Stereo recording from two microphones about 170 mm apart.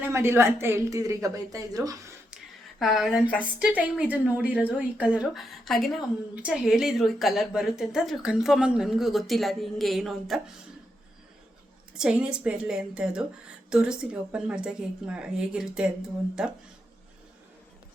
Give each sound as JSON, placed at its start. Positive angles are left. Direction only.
{"t": 0.1, "sound": "a woman's voice", "side_deg": -15}
{"t": 2.3, "sound": "a sound", "side_deg": 0}
{"t": 3.4, "sound": "a woman's voice", "side_deg": -10}
{"t": 11.9, "sound": "a woman's voice", "side_deg": -5}